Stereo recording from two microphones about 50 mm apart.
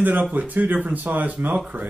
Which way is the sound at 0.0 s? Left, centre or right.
Right.